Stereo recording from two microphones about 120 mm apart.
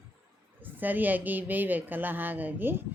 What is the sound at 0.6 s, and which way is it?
A woman's voice, 15° right (ahead or behind).